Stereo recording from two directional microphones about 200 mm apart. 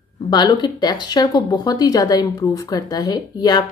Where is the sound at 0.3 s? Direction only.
20° left (ahead or behind).